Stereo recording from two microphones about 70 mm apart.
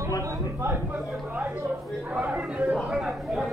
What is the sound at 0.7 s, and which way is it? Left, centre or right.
Speech, right.